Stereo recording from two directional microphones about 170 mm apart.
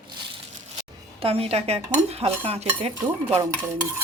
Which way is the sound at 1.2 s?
35° right (ahead or behind).